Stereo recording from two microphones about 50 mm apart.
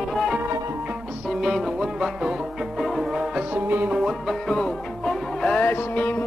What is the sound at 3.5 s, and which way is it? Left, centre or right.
Music, right.